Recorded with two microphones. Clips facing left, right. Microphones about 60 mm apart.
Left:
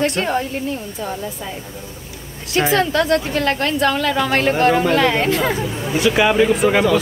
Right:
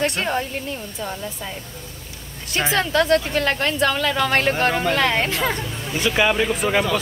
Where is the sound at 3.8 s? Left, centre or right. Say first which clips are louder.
Left 3 dB; left.